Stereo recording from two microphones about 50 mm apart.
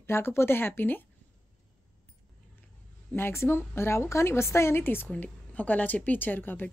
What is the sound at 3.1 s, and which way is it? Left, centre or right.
A woman's voice, left.